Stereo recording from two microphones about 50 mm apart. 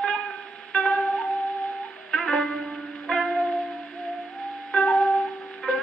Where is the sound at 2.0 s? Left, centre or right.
Centre.